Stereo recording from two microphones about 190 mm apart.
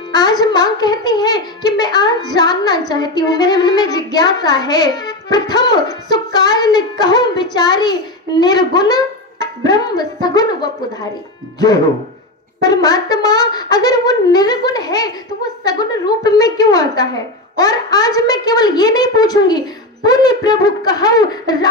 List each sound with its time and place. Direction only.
0.1 s a child's voice: 20° left (ahead or behind)
12.6 s a child's voice: 20° left (ahead or behind)